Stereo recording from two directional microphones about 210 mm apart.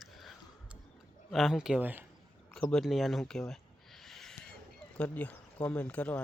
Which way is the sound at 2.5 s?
Centre (ahead or behind).